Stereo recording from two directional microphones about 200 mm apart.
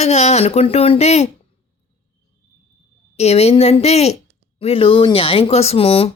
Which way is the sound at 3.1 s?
30° left (ahead or behind).